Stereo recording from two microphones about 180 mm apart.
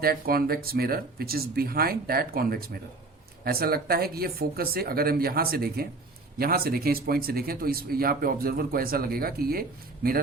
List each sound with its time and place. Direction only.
0.0 s speech: 55° right (ahead or behind)